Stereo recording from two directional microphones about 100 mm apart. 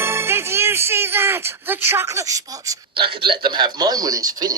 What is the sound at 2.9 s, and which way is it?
Speech, 55° right (ahead or behind).